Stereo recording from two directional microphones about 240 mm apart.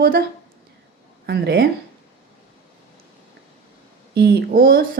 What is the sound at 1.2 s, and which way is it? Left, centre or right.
Speech, right.